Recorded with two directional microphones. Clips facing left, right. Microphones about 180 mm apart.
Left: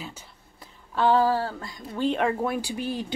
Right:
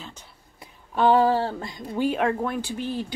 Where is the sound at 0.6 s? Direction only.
15° right (ahead or behind).